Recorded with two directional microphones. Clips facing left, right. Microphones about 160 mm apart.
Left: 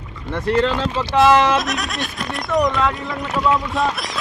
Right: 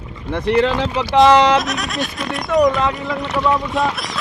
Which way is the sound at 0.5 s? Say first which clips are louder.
Right 2 dB; 15° right (ahead or behind).